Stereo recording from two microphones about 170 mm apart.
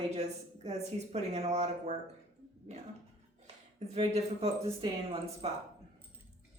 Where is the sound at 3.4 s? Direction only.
40° right (ahead or behind).